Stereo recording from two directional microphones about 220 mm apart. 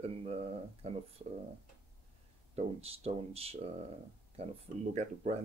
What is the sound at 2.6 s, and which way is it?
Speech, 30° right (ahead or behind).